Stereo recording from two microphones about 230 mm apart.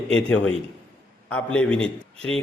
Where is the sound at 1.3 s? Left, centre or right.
Centre.